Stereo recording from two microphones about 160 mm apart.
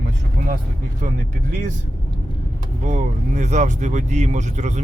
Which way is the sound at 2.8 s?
45° right (ahead or behind).